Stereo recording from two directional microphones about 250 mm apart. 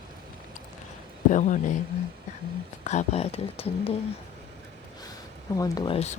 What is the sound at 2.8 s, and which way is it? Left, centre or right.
Speech, left.